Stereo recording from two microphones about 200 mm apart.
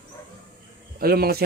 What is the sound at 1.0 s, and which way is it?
Speech, 50° right (ahead or behind).